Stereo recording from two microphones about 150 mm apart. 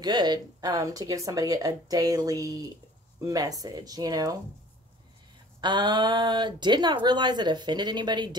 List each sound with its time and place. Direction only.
0.0 s speech: 30° right (ahead or behind)
5.6 s speech: 30° right (ahead or behind)